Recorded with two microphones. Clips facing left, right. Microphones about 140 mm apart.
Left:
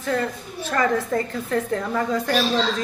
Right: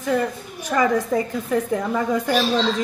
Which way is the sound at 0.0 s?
15° right (ahead or behind).